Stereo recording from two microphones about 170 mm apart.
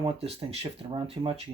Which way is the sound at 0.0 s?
35° right (ahead or behind).